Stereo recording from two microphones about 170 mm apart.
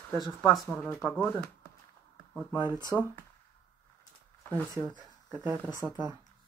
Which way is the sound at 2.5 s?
25° left (ahead or behind).